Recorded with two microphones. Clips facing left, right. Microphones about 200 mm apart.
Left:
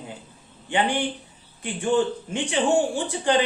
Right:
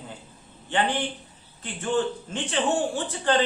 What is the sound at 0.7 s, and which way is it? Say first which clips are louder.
Speech: left 2 dB; 15° left (ahead or behind).